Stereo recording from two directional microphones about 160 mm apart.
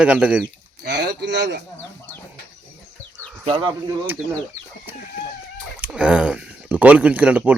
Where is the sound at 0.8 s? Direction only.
90° right.